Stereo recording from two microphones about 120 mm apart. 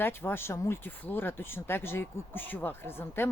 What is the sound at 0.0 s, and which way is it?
Speech, 20° left (ahead or behind).